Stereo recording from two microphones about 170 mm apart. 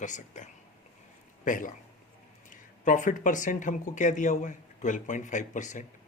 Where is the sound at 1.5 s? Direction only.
50° left (ahead or behind).